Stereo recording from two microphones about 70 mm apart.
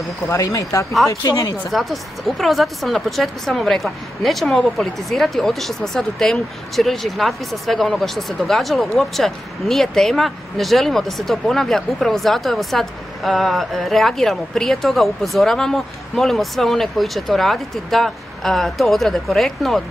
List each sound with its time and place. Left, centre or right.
0.3 s speech: left
1.7 s speech: centre